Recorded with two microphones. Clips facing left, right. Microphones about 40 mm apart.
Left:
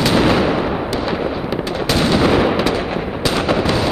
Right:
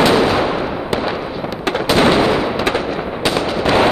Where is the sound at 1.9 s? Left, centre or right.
Right.